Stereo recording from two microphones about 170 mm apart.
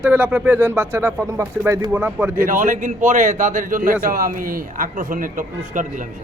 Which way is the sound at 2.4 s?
50° right (ahead or behind).